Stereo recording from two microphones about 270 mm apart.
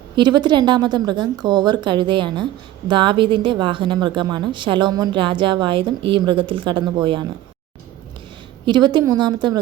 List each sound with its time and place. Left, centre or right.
0.2 s a woman's voice: centre
8.6 s a woman's voice: centre